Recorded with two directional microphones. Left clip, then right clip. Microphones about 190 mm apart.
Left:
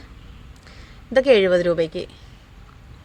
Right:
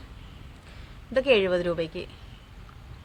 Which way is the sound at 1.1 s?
30° left (ahead or behind).